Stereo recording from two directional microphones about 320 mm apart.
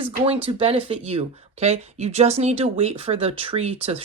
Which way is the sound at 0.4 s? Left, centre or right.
Centre.